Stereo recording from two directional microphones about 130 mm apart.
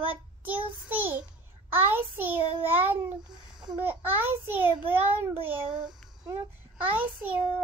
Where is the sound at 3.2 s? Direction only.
35° right (ahead or behind).